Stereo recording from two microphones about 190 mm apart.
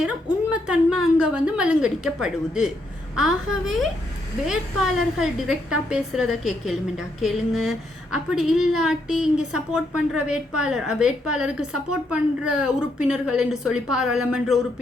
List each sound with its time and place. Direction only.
0.5 s a woman's voice: 5° right (ahead or behind)